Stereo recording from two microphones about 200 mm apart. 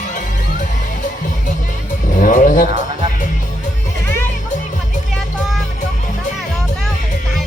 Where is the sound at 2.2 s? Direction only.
40° left (ahead or behind).